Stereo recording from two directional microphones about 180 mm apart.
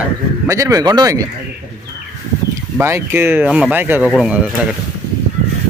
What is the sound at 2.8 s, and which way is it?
Speech, 15° right (ahead or behind).